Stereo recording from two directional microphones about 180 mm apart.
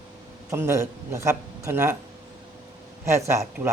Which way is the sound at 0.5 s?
15° right (ahead or behind).